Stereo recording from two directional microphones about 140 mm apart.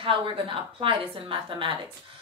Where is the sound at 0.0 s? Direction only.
40° right (ahead or behind).